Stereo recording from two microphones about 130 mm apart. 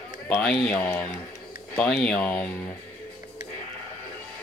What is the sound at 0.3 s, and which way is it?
Speech, 5° left (ahead or behind).